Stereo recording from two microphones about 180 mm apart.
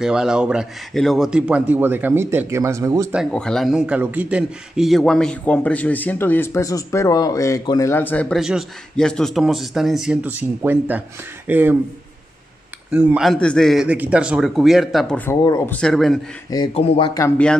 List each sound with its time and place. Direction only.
0.0 s a man's voice: 5° right (ahead or behind)
3.1 s a man's voice: centre (ahead or behind)
12.9 s a man's voice: 5° right (ahead or behind)
15.4 s speech: 20° left (ahead or behind)
15.7 s a man's voice: 5° left (ahead or behind)
16.4 s speech: 20° left (ahead or behind)
16.7 s speech: 35° left (ahead or behind)